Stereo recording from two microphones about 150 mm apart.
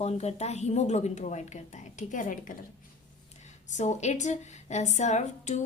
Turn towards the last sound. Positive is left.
turn(degrees=50)  # may be behind; listen again after turning